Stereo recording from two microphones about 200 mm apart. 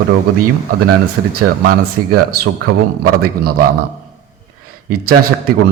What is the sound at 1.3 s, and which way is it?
Speech, 50° right (ahead or behind).